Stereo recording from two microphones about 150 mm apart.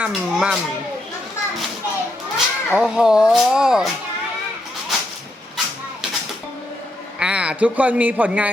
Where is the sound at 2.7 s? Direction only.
5° right (ahead or behind).